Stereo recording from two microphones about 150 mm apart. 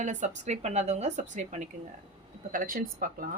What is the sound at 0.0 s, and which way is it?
A woman's voice, 50° right (ahead or behind).